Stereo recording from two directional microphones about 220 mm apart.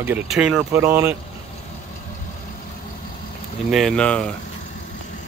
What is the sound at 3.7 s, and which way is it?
Speech, centre (ahead or behind).